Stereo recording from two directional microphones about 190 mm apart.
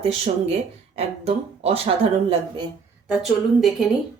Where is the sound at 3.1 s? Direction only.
5° right (ahead or behind).